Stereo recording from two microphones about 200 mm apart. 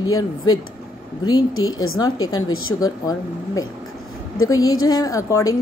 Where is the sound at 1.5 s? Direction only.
90° left.